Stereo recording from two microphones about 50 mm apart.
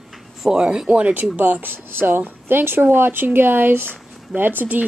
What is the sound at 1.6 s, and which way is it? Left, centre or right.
Speech, right.